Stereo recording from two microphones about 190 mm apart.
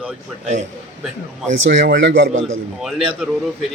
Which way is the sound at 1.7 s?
70° right (ahead or behind).